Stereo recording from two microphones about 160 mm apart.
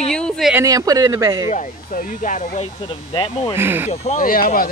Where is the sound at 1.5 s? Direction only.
50° left (ahead or behind).